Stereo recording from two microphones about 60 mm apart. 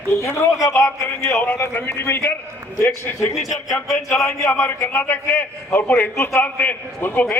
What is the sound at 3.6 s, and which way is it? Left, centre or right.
Speech, centre.